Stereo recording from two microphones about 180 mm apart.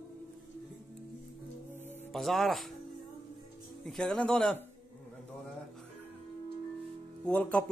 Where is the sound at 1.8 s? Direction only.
10° left (ahead or behind).